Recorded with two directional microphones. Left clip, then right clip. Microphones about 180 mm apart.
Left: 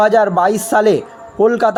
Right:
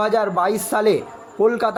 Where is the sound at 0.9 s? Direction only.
5° left (ahead or behind).